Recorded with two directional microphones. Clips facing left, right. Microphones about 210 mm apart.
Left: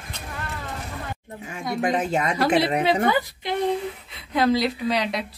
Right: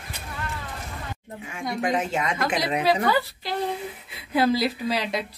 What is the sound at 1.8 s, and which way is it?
Speech, 35° left (ahead or behind).